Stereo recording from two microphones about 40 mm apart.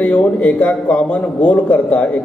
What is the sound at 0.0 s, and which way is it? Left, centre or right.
A man's voice, left.